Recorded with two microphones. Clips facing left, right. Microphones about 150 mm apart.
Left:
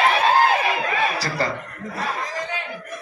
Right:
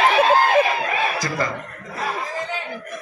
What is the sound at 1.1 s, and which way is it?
Chuckle, 35° left (ahead or behind).